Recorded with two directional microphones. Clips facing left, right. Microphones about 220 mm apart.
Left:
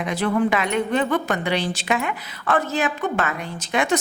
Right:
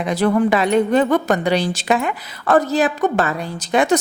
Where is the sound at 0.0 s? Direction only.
35° right (ahead or behind).